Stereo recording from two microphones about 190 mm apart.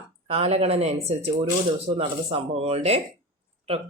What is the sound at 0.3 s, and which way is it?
Speech, 30° right (ahead or behind).